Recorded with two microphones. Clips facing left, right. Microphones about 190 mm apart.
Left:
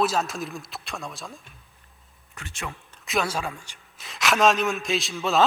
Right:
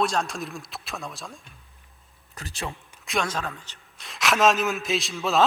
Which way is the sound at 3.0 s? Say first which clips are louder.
Left 1 dB; 5° left (ahead or behind).